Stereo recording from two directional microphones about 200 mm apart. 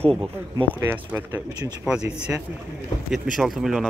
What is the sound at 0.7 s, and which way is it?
Speech, 10° right (ahead or behind).